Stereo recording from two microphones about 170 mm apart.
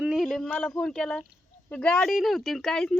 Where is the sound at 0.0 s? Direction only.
5° right (ahead or behind).